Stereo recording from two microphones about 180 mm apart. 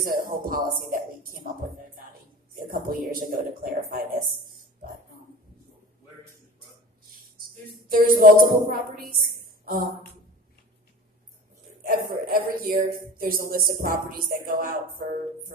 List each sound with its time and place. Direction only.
0.0 s speech: 55° right (ahead or behind)
2.5 s speech: 50° right (ahead or behind)
7.1 s a sound: 55° right (ahead or behind)
7.9 s a woman's voice: 50° right (ahead or behind)
12.3 s speech: 55° right (ahead or behind)